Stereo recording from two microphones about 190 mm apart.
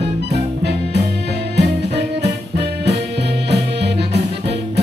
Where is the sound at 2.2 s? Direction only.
65° right (ahead or behind).